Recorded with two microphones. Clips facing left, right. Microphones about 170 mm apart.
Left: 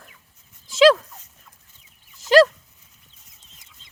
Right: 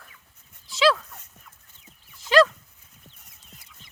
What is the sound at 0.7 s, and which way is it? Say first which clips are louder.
Dog: left 7 dB; 45° left (ahead or behind).